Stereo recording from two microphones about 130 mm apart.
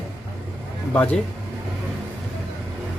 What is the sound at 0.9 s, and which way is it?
Speech, 15° left (ahead or behind).